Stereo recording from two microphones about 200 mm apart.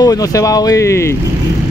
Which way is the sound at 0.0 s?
15° left (ahead or behind).